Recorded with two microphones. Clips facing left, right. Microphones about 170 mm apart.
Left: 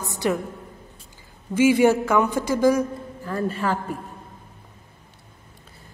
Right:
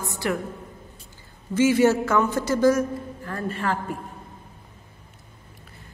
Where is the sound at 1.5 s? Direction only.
10° left (ahead or behind).